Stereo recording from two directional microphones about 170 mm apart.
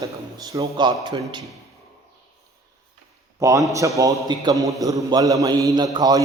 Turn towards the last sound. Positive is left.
turn(degrees=-20)  # may be behind; listen again after turning